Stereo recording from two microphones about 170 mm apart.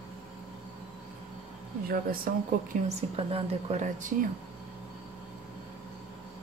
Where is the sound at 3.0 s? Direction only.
35° right (ahead or behind).